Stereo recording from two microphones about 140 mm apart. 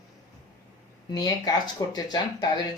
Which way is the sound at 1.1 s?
30° left (ahead or behind).